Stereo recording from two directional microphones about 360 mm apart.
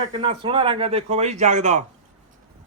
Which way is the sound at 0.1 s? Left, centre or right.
Centre.